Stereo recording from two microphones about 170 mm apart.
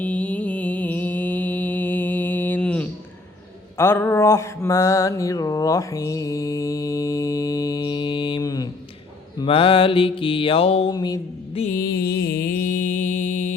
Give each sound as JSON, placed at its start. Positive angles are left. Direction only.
{"t": 0.0, "sound": "mantra", "side_deg": 10}
{"t": 10.9, "sound": "mantra", "side_deg": 25}
{"t": 11.5, "sound": "mantra", "side_deg": 40}
{"t": 11.8, "sound": "music", "side_deg": 65}